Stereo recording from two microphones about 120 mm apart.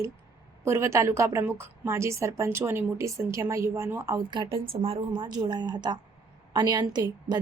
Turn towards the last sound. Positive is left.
turn(degrees=-35)  # may be behind; listen again after turning